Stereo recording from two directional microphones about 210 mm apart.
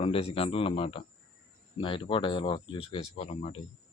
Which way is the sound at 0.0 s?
30° left (ahead or behind).